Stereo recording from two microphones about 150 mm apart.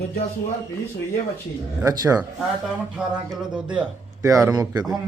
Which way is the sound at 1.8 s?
25° right (ahead or behind).